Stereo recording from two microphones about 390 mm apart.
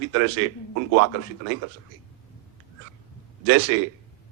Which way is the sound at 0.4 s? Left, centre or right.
Right.